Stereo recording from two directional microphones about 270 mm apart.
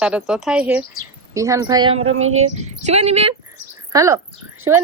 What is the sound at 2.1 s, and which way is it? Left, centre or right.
Speech, right.